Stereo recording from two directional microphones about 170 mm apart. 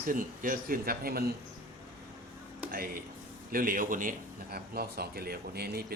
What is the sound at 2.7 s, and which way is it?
A man's voice, 60° right (ahead or behind).